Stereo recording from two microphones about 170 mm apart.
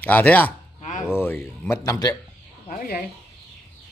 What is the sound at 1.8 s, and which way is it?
Speech, 20° left (ahead or behind).